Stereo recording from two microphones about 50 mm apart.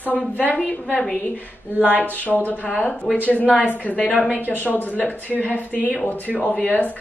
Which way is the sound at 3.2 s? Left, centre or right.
Left.